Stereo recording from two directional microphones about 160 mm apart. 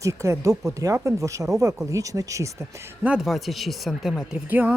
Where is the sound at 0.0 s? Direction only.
20° right (ahead or behind).